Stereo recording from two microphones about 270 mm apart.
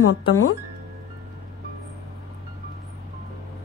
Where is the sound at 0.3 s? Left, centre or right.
Left.